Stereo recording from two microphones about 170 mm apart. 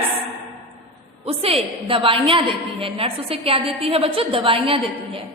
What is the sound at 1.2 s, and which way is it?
A woman's voice, 35° right (ahead or behind).